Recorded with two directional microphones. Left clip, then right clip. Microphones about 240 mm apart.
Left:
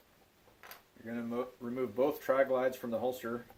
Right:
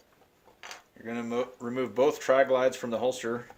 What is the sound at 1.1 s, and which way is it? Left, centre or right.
Speech, right.